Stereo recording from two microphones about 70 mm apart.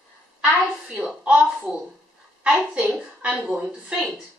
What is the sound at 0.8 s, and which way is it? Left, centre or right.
A woman's voice, centre.